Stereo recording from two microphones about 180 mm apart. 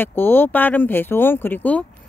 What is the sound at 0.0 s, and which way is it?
Speech, 10° left (ahead or behind).